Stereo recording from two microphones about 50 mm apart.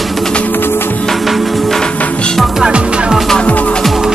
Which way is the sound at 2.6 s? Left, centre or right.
Centre.